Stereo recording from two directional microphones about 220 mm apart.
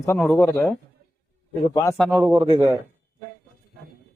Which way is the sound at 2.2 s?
15° right (ahead or behind).